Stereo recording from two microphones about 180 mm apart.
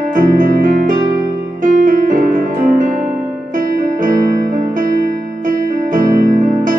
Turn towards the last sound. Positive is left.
turn(degrees=-50)  # may be behind; listen again after turning